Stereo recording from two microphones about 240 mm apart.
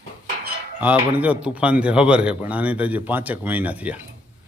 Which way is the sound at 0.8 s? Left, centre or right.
Centre.